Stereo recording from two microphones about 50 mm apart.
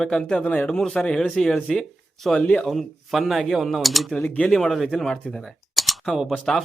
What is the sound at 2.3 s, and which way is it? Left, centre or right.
Speech, left.